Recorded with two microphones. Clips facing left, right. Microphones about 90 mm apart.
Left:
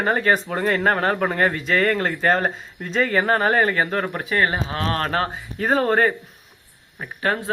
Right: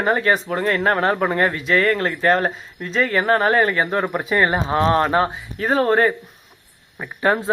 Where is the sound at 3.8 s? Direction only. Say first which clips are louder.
Right 3 dB; 15° right (ahead or behind).